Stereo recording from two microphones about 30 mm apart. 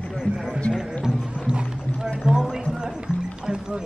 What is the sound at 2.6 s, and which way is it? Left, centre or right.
Music, centre.